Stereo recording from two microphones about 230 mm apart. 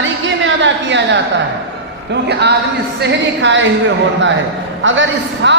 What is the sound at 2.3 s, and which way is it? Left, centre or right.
A man's voice, right.